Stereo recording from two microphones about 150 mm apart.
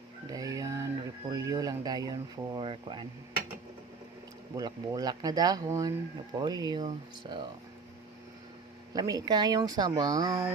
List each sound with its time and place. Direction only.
0.3 s music: 25° right (ahead or behind)
1.3 s speech: 25° right (ahead or behind)
4.5 s speech: 25° right (ahead or behind)
8.9 s speech: 25° right (ahead or behind)